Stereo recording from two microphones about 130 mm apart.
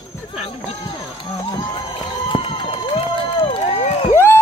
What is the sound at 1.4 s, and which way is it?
Music, 35° left (ahead or behind).